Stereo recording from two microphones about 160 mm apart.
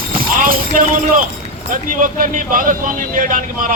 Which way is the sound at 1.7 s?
55° right (ahead or behind).